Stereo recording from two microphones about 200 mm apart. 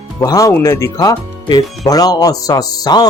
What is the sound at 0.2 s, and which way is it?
Speech, 15° left (ahead or behind).